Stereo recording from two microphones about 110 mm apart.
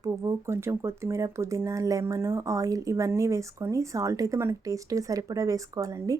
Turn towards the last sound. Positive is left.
turn(degrees=-30)  # may be behind; listen again after turning